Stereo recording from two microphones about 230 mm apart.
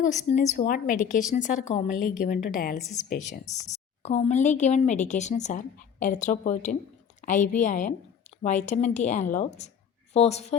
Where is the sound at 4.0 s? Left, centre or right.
Left.